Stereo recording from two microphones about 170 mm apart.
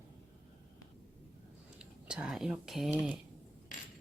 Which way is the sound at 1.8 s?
5° right (ahead or behind).